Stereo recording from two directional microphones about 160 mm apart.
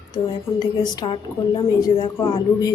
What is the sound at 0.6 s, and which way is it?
A woman's voice, 25° left (ahead or behind).